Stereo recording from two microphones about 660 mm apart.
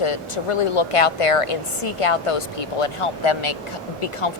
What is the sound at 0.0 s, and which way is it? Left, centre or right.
A woman's voice, left.